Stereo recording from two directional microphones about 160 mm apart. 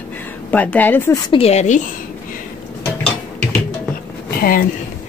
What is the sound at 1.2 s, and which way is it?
Speech, 35° left (ahead or behind).